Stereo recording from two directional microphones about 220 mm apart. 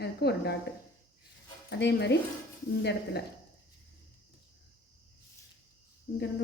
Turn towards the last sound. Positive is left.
turn(degrees=45)  # may be behind; listen again after turning